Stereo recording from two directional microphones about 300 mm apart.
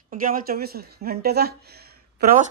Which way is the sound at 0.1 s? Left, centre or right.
Right.